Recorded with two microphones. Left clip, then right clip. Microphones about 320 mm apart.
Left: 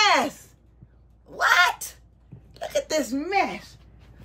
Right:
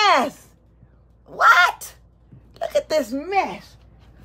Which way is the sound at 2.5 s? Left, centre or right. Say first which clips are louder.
Right 5 dB; centre.